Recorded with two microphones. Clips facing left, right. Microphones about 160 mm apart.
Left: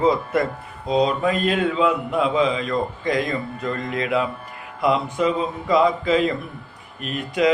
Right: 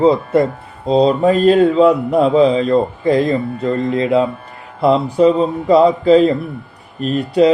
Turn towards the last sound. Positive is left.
turn(degrees=-35)  # may be behind; listen again after turning